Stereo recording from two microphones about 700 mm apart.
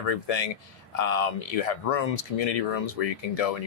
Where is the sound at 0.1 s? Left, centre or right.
Left.